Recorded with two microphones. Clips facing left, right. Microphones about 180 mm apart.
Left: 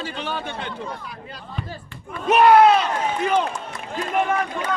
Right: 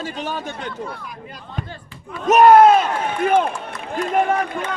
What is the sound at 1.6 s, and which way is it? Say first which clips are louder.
Speech: left 1 dB; 5° left (ahead or behind).